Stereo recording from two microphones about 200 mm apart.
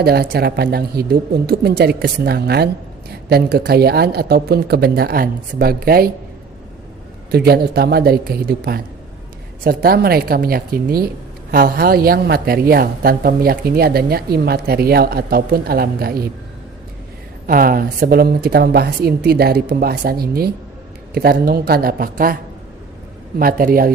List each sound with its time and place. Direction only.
0.0 s a woman's voice: 50° right (ahead or behind)
7.3 s a woman's voice: 50° right (ahead or behind)
17.4 s a woman's voice: 45° right (ahead or behind)
23.4 s a woman's voice: 45° right (ahead or behind)